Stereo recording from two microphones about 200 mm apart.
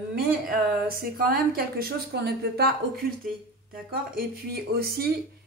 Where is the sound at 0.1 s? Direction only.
45° right (ahead or behind).